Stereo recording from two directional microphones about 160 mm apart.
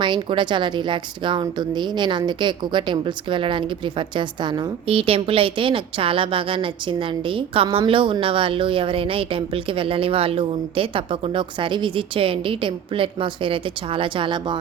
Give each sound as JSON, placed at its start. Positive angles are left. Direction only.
{"t": 0.0, "sound": "a woman's voice", "side_deg": -30}